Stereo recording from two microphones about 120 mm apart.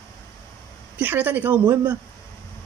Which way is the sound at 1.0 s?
15° right (ahead or behind).